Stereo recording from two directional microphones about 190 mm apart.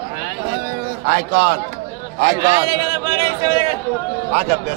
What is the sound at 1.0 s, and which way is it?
Speech, 55° right (ahead or behind).